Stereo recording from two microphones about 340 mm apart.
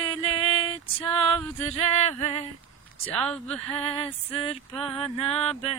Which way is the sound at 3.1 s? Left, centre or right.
Centre.